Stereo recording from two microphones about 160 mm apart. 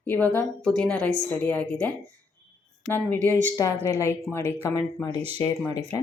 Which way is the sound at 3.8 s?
15° left (ahead or behind).